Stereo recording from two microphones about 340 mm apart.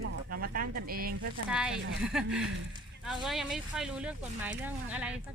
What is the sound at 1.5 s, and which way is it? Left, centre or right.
Speech, centre.